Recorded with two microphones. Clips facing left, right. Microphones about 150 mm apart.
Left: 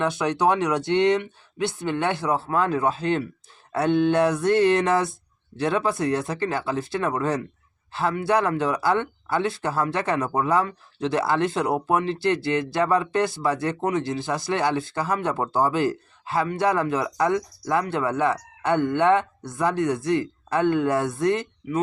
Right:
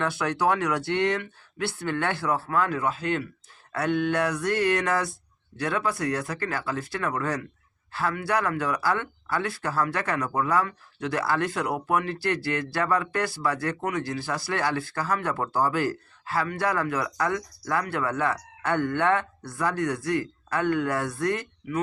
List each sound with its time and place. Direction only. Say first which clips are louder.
0.0 s speech: left 3 dB; 20° left (ahead or behind)